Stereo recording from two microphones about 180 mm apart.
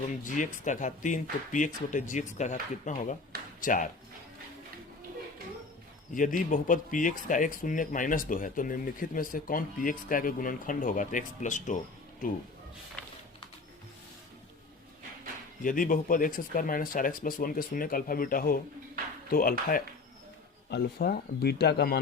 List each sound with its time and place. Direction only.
0.3 s speech: 45° left (ahead or behind)
6.1 s speech: 45° left (ahead or behind)
15.6 s speech: 50° left (ahead or behind); by 22.0 s 65° left (ahead or behind)